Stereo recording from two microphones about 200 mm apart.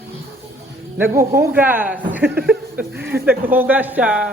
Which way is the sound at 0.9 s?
15° right (ahead or behind).